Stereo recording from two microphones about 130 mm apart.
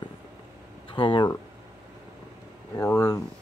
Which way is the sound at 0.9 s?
40° left (ahead or behind).